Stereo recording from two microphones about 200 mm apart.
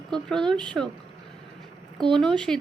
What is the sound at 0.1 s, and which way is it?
Speech, 5° left (ahead or behind).